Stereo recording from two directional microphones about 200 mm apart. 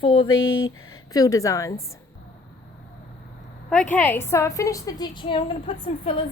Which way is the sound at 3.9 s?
10° left (ahead or behind).